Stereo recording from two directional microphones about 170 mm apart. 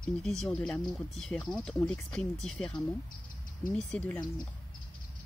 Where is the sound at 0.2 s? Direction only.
Centre (ahead or behind).